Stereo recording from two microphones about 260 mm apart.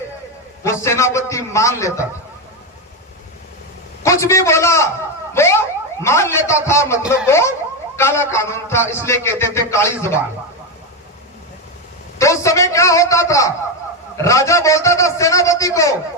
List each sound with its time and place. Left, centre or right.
0.6 s a man's voice: centre
4.0 s a man's voice: centre
5.3 s a sound: centre
6.0 s a man's voice: centre
12.2 s a man's voice: centre